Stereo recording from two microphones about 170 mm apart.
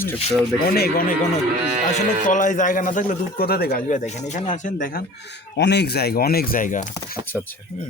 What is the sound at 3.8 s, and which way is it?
Speech, 45° left (ahead or behind).